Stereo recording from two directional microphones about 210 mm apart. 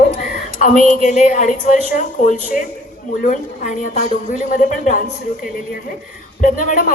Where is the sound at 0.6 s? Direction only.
35° left (ahead or behind).